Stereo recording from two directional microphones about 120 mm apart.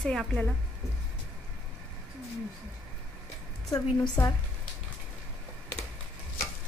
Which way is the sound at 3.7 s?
30° left (ahead or behind).